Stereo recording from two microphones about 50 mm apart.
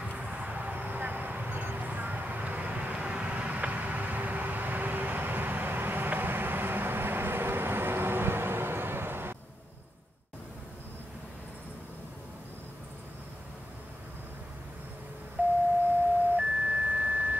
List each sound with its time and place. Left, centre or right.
0.0 s vehicle: right
15.4 s a sound: right
16.3 s beep: right